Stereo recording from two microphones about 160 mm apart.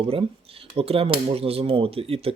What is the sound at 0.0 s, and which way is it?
Speech, 35° right (ahead or behind).